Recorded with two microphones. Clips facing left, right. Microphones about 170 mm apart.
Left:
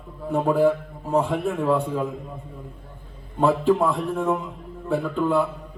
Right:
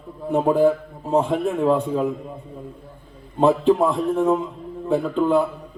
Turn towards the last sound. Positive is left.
turn(degrees=-20)  # may be behind; listen again after turning